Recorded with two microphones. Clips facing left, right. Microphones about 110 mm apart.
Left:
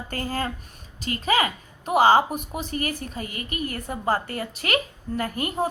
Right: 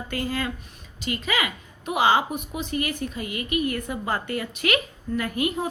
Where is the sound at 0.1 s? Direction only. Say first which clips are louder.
Even; 40° left (ahead or behind).